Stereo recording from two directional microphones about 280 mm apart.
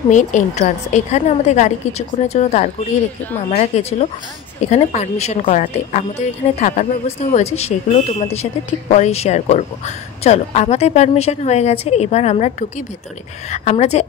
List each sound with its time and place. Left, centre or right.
0.1 s speech: left